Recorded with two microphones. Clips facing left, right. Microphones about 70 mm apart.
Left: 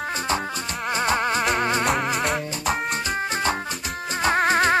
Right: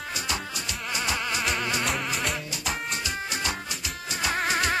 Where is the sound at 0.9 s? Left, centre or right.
Left.